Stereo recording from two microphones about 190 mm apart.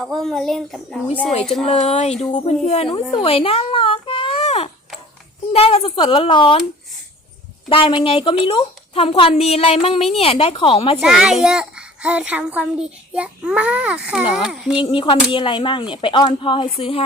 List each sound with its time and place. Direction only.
0.0 s a child's voice: centre (ahead or behind)
1.3 s a woman's voice: 35° left (ahead or behind)
7.7 s a woman's voice: 25° left (ahead or behind)
11.0 s a child's voice: 5° right (ahead or behind)
14.8 s a woman's voice: 25° left (ahead or behind)